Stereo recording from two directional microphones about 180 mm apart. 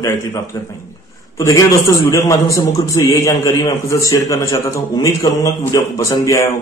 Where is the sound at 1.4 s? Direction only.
15° left (ahead or behind).